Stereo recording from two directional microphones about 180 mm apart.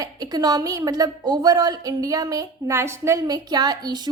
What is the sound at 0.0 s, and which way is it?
A woman's voice, 20° right (ahead or behind).